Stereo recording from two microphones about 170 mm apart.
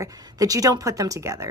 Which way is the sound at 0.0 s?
20° right (ahead or behind).